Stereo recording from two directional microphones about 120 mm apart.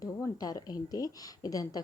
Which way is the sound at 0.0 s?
30° left (ahead or behind).